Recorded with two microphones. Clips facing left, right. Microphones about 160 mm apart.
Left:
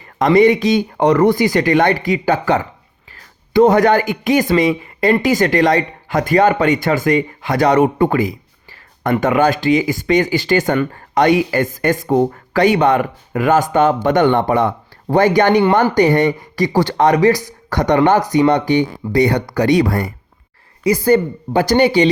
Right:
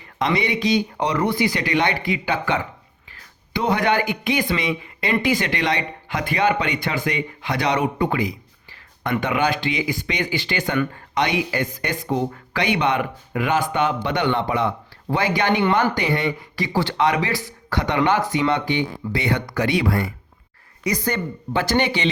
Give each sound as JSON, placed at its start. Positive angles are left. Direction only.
{"t": 0.0, "sound": "speech", "side_deg": 45}
{"t": 20.8, "sound": "speech", "side_deg": 30}